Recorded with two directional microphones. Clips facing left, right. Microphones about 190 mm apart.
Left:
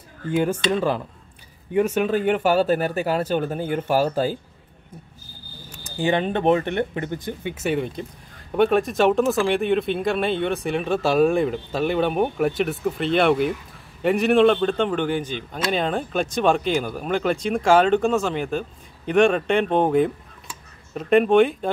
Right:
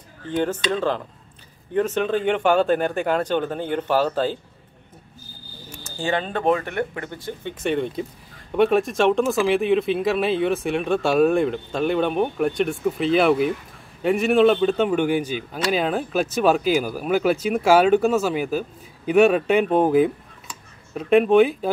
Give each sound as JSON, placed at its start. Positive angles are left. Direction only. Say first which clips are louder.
{"t": 0.3, "sound": "speech", "louder": "left 2 dB", "side_deg": 10}
{"t": 5.9, "sound": "speech", "louder": "left 3 dB", "side_deg": 20}